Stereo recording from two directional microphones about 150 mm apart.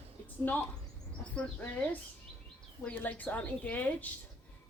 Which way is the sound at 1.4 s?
10° left (ahead or behind).